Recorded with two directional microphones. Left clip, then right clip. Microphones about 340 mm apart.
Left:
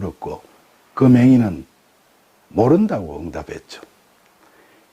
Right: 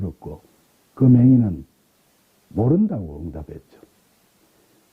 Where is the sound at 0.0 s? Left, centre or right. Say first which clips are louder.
Left 7 dB; centre.